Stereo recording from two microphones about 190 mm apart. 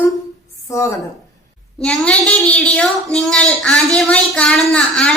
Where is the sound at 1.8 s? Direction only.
5° left (ahead or behind).